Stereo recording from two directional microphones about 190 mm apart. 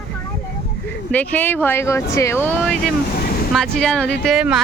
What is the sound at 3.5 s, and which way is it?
Speech, 5° left (ahead or behind).